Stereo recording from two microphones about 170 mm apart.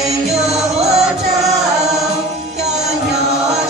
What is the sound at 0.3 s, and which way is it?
Music, 40° right (ahead or behind).